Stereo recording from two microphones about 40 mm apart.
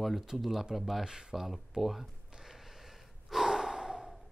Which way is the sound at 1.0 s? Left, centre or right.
Centre.